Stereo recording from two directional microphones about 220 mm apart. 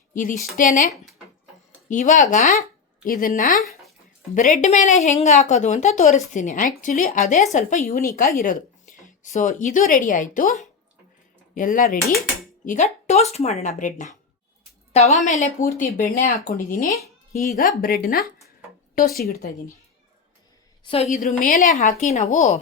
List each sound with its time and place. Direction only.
0.1 s a woman's voice: 35° left (ahead or behind)
1.9 s a woman's voice: 35° left (ahead or behind)
11.5 s a woman's voice: 35° left (ahead or behind)
16.8 s speech: 15° left (ahead or behind)
17.3 s speech: centre (ahead or behind)
17.6 s a woman's voice: 40° left (ahead or behind)
20.8 s a woman's voice: 25° left (ahead or behind)